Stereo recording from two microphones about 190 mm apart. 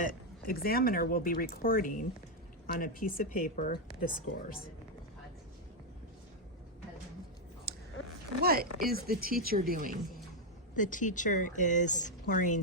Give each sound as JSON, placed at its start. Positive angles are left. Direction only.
{"t": 0.0, "sound": "speech", "side_deg": 50}
{"t": 8.4, "sound": "speech", "side_deg": -55}
{"t": 10.8, "sound": "speech", "side_deg": 45}